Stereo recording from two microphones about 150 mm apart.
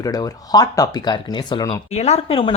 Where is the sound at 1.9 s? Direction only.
45° left (ahead or behind).